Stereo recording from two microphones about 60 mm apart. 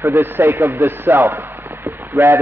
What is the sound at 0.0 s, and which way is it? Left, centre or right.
Speech, right.